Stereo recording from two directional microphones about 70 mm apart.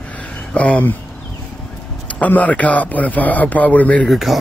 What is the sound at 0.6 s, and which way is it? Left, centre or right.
Speech, centre.